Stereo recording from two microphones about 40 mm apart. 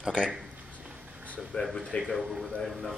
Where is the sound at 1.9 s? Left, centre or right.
Left.